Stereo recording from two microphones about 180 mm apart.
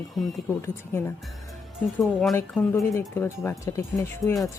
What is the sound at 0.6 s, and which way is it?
Speech, 15° left (ahead or behind).